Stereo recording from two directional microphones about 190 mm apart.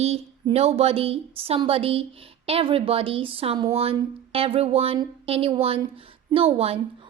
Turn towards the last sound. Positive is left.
turn(degrees=-30)  # may be behind; listen again after turning